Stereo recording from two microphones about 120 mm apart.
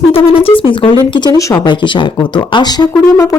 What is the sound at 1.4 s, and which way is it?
Speech, 25° left (ahead or behind).